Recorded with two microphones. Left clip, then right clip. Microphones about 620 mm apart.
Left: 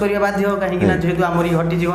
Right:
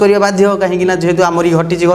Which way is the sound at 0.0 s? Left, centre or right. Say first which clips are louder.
Right 8 dB; right.